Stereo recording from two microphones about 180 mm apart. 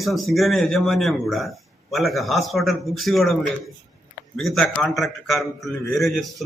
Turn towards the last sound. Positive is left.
turn(degrees=0)  # may be behind; listen again after turning